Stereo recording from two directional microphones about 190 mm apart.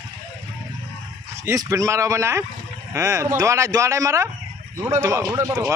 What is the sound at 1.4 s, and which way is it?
A man's voice, 15° right (ahead or behind).